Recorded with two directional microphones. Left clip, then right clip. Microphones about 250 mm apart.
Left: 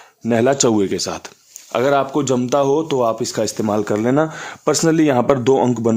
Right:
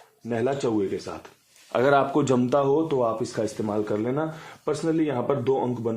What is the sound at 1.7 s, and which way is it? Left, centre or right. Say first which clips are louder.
Speech: left 4 dB; left.